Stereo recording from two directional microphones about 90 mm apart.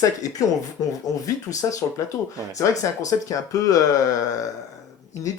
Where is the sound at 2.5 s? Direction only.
40° left (ahead or behind).